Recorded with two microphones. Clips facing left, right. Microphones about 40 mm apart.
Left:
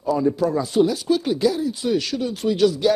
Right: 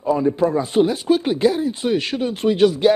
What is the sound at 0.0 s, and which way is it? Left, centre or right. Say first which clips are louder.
Speech: right 2 dB; right.